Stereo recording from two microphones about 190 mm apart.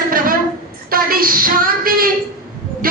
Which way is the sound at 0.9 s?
50° right (ahead or behind).